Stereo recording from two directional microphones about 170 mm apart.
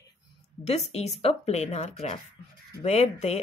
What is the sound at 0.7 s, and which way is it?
Speech, 40° left (ahead or behind).